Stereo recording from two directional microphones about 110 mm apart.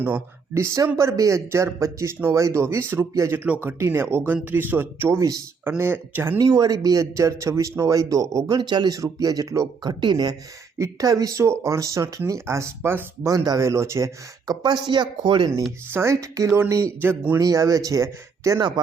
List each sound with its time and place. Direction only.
0.0 s speech: 20° right (ahead or behind)
3.4 s speech: 15° right (ahead or behind)
6.4 s speech: 35° right (ahead or behind)
10.8 s speech: 30° right (ahead or behind)
13.3 s speech: 35° right (ahead or behind)
15.9 s speech: 25° right (ahead or behind)
17.4 s speech: 30° right (ahead or behind)